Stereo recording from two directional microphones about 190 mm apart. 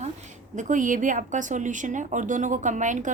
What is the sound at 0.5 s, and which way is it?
A woman's voice, 40° right (ahead or behind).